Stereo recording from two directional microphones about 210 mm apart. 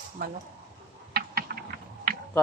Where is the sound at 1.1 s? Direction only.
45° right (ahead or behind).